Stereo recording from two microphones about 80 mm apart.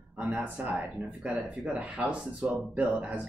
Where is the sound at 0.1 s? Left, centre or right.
Right.